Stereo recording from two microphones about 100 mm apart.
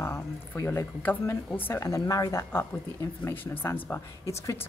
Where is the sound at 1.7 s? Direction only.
30° left (ahead or behind).